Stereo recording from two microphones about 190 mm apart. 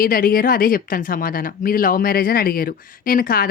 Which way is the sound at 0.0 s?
50° left (ahead or behind).